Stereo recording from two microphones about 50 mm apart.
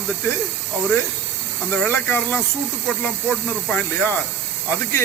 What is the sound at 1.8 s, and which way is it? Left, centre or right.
Speech, left.